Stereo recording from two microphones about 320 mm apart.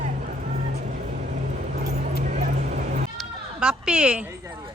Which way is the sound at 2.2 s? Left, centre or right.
Right.